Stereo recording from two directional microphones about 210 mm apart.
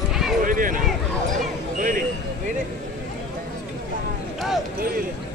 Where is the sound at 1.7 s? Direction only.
40° right (ahead or behind).